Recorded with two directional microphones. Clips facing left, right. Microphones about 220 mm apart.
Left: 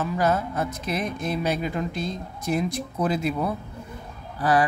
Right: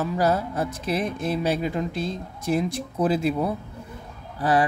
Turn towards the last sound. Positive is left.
turn(degrees=-25)  # may be behind; listen again after turning